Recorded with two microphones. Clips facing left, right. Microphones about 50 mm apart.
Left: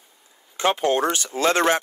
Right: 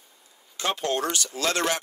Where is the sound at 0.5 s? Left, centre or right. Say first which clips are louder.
Left 6 dB; left.